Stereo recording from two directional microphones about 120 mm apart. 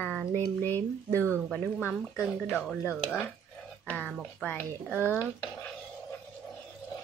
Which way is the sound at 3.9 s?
10° left (ahead or behind).